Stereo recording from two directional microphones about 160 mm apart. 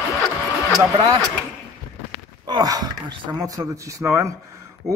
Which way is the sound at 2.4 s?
25° right (ahead or behind).